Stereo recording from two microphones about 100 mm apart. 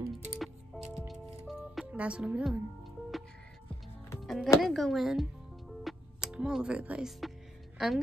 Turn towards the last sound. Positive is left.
turn(degrees=0)  # may be behind; listen again after turning